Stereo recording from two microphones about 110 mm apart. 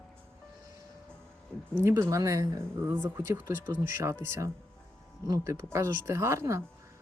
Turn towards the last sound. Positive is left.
turn(degrees=-25)  # may be behind; listen again after turning